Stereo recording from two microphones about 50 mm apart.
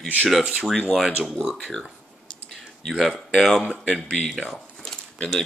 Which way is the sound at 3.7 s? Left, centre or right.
Centre.